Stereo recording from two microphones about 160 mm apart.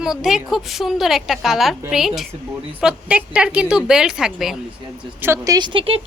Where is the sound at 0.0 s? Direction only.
Centre (ahead or behind).